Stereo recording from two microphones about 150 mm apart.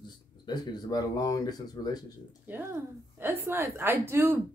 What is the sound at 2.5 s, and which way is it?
Speech, 10° right (ahead or behind).